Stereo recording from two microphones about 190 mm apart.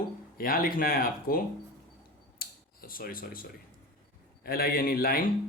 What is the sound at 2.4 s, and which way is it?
Scissors, 50° left (ahead or behind).